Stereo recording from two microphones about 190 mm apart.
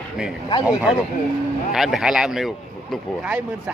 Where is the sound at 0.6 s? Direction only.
5° right (ahead or behind).